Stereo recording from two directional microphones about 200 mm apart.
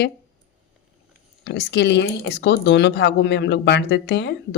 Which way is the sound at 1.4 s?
60° left (ahead or behind).